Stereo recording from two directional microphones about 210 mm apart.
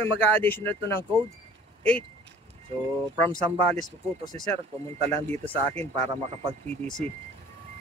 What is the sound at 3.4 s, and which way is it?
Speech, 30° right (ahead or behind).